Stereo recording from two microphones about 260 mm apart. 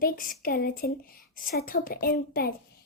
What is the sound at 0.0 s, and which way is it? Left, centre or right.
A child's voice, left.